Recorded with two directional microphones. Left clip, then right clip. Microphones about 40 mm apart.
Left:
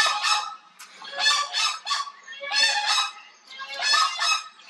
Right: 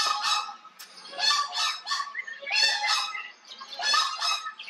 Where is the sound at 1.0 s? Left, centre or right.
Left.